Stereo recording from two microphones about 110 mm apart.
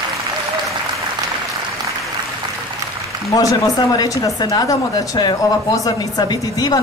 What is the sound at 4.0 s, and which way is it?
Speech, 35° left (ahead or behind).